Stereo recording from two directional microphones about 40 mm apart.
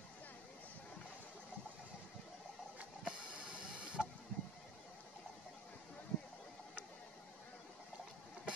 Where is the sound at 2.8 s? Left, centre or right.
Right.